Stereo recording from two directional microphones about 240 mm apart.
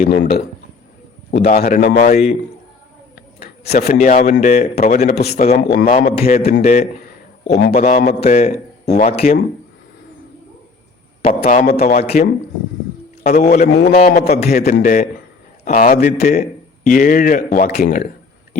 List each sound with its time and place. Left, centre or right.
0.0 s speech: left
1.3 s a man's voice: left
3.6 s a man's voice: left
11.2 s a man's voice: left
13.7 s speech: left